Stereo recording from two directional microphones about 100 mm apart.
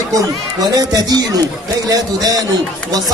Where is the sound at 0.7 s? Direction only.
40° right (ahead or behind).